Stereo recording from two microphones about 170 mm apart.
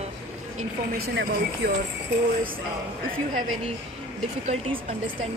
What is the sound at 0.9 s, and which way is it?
Speech, 65° right (ahead or behind).